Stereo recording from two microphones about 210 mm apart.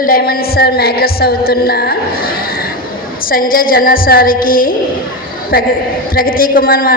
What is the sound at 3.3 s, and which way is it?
A woman's voice, 45° left (ahead or behind).